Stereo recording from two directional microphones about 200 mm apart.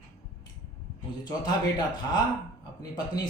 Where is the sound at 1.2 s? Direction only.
20° left (ahead or behind).